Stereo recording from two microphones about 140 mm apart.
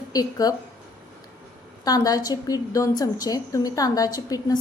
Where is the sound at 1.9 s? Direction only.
25° left (ahead or behind).